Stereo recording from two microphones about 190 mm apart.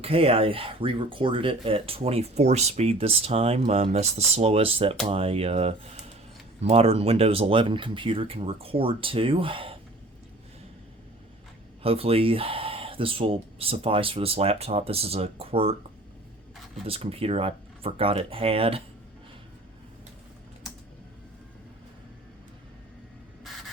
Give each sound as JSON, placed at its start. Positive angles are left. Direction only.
{"t": 0.0, "sound": "speech", "side_deg": -30}
{"t": 11.8, "sound": "speech", "side_deg": -30}
{"t": 16.8, "sound": "speech", "side_deg": -30}